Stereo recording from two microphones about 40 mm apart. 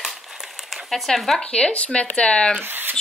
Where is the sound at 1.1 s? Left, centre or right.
Centre.